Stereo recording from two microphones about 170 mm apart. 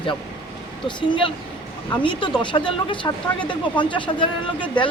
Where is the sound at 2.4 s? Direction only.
30° left (ahead or behind).